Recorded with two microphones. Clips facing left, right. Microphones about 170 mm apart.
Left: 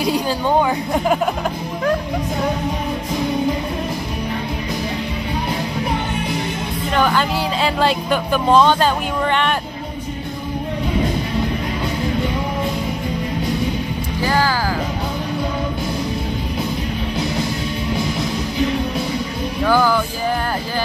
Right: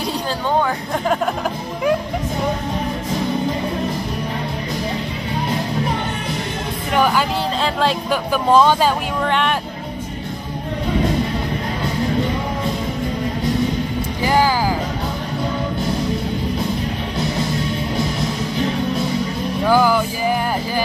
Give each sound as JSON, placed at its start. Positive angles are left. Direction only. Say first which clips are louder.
{"t": 0.0, "sound": "a woman's voice", "louder": "left 4 dB", "side_deg": 10}
{"t": 6.9, "sound": "music", "louder": "right 1 dB", "side_deg": -10}
{"t": 7.6, "sound": "speech", "louder": "left 3 dB", "side_deg": 0}
{"t": 14.2, "sound": "music", "louder": "right 2 dB", "side_deg": -15}
{"t": 19.6, "sound": "music", "louder": "right 1 dB", "side_deg": -10}